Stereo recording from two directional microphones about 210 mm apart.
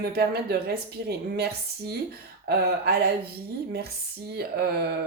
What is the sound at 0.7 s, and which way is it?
Speech, 50° right (ahead or behind).